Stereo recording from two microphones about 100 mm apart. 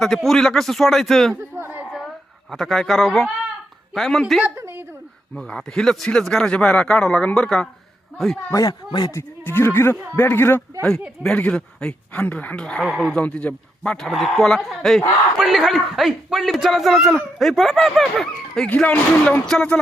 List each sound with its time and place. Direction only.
0.0 s speech: centre (ahead or behind)
1.4 s a sound: 25° right (ahead or behind)
2.5 s speech: 5° left (ahead or behind)
4.4 s a sound: 25° right (ahead or behind)
5.3 s a man's voice: 5° left (ahead or behind)
8.5 s speech: 40° left (ahead or behind)
9.4 s speech: 20° left (ahead or behind)
11.2 s a man's voice: 10° left (ahead or behind)
12.8 s speech: centre (ahead or behind)
13.1 s speech: 10° left (ahead or behind)
18.7 s a man's voice: 15° left (ahead or behind)